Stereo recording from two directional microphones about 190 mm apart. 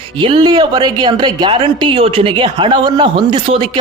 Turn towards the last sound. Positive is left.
turn(degrees=-30)  # may be behind; listen again after turning